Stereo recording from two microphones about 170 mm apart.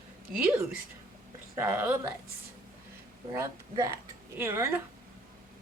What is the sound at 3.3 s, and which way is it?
A woman's voice, 20° right (ahead or behind).